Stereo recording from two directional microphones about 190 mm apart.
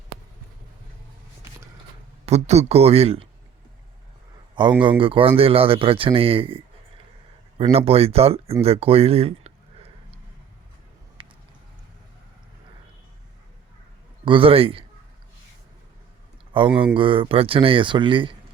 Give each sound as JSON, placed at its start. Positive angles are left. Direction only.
{"t": 2.2, "sound": "speech", "side_deg": -35}
{"t": 4.8, "sound": "speech", "side_deg": -25}
{"t": 7.6, "sound": "speech", "side_deg": -30}
{"t": 11.2, "sound": "a sound", "side_deg": -25}
{"t": 14.3, "sound": "speech", "side_deg": -30}
{"t": 16.5, "sound": "speech", "side_deg": -25}